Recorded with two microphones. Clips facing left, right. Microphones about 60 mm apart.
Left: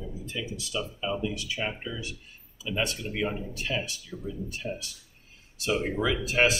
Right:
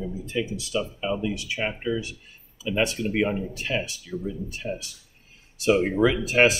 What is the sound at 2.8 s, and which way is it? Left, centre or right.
Speech, centre.